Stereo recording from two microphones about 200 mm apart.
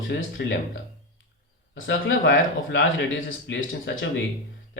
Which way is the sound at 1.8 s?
70° left (ahead or behind).